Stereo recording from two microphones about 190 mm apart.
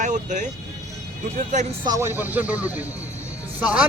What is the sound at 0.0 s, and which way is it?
Speech, 40° right (ahead or behind).